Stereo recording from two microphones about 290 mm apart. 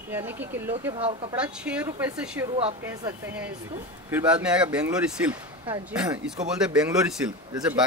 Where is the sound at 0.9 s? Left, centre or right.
Centre.